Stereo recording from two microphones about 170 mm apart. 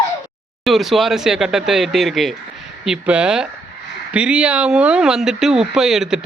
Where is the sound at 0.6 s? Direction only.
Centre (ahead or behind).